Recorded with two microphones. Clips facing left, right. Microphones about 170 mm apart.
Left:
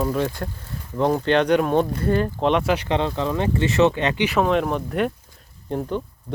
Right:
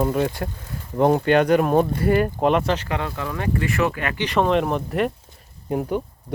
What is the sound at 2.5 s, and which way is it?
Speech, 5° left (ahead or behind).